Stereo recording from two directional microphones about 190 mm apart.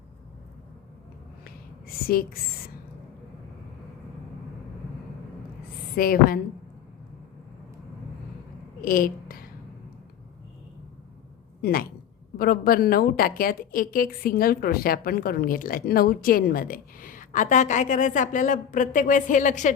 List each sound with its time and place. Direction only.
2.0 s a woman's voice: 50° left (ahead or behind)
6.0 s a woman's voice: 50° left (ahead or behind)
8.8 s a sound: 50° left (ahead or behind)
11.6 s a woman's voice: 50° left (ahead or behind)